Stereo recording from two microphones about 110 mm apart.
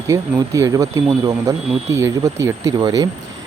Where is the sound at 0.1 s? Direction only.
30° right (ahead or behind).